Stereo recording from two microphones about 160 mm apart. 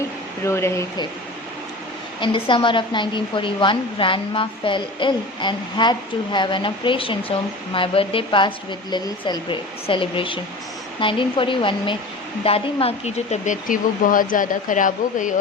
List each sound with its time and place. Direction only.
0.4 s speech: 15° left (ahead or behind)
2.2 s a woman's voice: 30° left (ahead or behind); by 15.3 s 55° left (ahead or behind)